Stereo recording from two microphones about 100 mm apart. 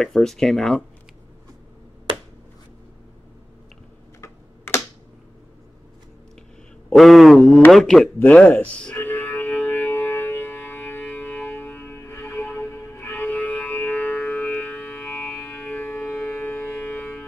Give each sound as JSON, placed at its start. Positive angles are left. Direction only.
{"t": 0.0, "sound": "speech", "side_deg": 5}
{"t": 4.2, "sound": "typing", "side_deg": 30}
{"t": 6.9, "sound": "speech", "side_deg": 0}
{"t": 8.9, "sound": "music", "side_deg": 20}
{"t": 13.4, "sound": "music", "side_deg": 5}
{"t": 13.7, "sound": "music", "side_deg": 20}
{"t": 16.3, "sound": "civil defense siren", "side_deg": 20}